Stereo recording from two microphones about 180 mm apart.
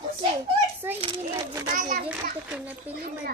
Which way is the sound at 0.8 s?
10° right (ahead or behind).